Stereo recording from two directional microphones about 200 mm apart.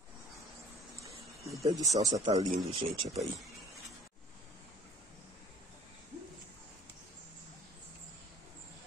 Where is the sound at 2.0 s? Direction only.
15° right (ahead or behind).